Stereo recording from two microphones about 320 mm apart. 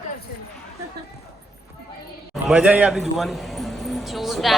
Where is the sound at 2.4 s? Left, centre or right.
Centre.